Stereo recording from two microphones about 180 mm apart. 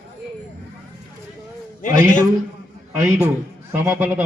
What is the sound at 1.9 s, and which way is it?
A man's voice, 15° right (ahead or behind).